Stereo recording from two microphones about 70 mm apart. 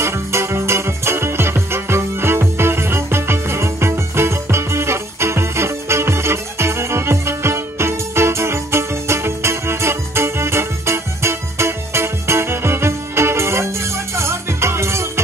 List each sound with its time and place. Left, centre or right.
0.0 s music: right